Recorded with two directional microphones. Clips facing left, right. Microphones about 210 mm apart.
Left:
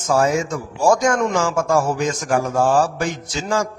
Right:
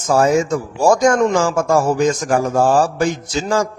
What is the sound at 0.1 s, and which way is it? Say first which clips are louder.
Mantra: right 4 dB; 40° right (ahead or behind).